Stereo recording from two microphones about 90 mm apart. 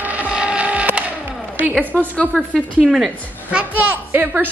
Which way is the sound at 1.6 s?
15° right (ahead or behind).